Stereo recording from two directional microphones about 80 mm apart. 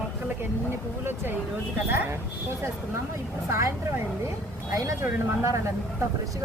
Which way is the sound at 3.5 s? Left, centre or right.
Right.